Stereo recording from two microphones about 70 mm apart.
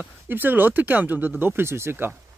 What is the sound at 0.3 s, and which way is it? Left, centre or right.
Speech, right.